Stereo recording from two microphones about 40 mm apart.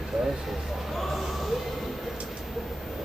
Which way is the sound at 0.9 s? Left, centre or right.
Centre.